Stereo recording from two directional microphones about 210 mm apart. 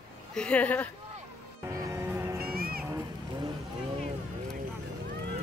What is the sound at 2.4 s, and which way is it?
Music, 45° right (ahead or behind).